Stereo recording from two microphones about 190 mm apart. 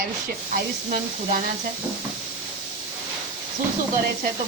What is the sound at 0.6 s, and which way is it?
Speech, 45° right (ahead or behind).